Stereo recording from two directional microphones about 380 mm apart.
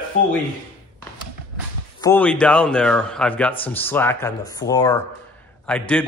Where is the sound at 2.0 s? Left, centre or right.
Centre.